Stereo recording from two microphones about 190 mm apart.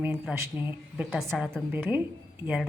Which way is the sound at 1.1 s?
Centre (ahead or behind).